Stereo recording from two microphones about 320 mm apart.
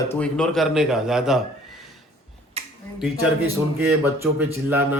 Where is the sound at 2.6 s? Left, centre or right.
Centre.